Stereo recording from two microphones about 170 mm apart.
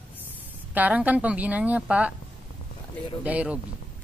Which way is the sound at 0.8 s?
10° right (ahead or behind).